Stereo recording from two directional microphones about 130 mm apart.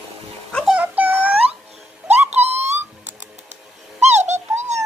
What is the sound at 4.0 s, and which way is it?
Dog, 60° right (ahead or behind).